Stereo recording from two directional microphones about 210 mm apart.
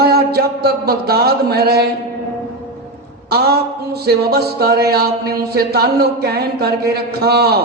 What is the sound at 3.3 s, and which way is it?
A man's voice, 50° right (ahead or behind).